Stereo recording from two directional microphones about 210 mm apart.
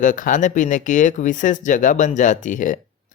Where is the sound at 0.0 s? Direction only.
40° left (ahead or behind).